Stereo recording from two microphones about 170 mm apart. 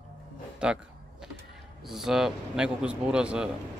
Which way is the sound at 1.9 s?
Centre (ahead or behind).